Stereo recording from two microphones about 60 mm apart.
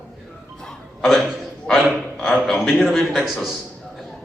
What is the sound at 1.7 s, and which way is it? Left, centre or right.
A man's voice, centre.